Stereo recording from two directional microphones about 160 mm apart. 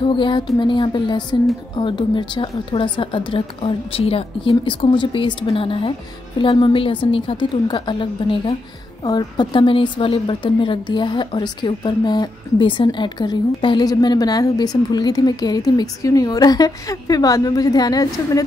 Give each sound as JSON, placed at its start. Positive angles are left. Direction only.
{"t": 0.0, "sound": "a woman's voice", "side_deg": 30}